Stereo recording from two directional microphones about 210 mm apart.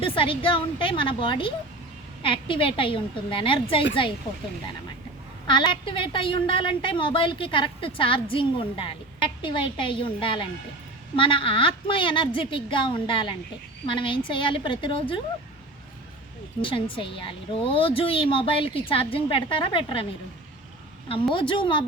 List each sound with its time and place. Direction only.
0.0 s a woman's voice: 25° left (ahead or behind)
5.5 s a woman's voice: 20° left (ahead or behind)
16.6 s a woman's voice: 25° left (ahead or behind)
21.3 s a woman's voice: 25° left (ahead or behind)